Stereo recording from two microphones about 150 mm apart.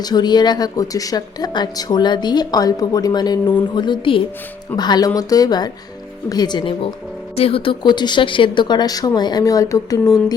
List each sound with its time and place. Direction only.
0.0 s speech: 30° left (ahead or behind)